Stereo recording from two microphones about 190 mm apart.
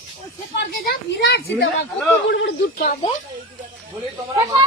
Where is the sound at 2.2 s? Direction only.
75° left (ahead or behind).